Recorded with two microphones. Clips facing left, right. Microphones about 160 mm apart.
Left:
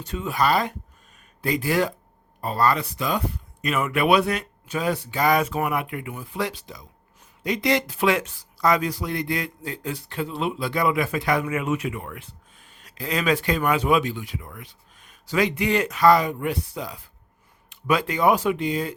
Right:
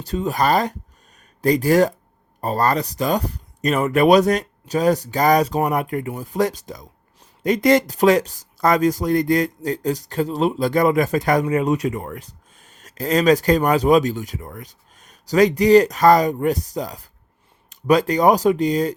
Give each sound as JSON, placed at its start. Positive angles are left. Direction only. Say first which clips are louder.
{"t": 0.0, "sound": "speech", "louder": "right 3 dB", "side_deg": -35}